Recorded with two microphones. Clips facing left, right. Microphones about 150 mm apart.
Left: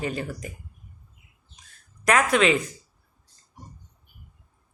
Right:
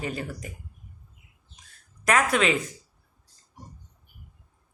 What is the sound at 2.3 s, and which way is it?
Speech, 30° left (ahead or behind).